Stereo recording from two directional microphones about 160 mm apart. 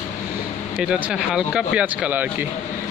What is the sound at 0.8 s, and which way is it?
Speech, 5° right (ahead or behind).